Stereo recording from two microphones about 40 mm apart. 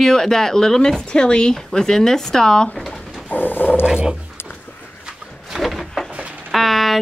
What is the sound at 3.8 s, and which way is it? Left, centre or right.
Dog, right.